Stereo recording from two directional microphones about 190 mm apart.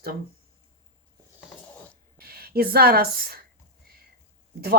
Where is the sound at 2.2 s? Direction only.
55° right (ahead or behind).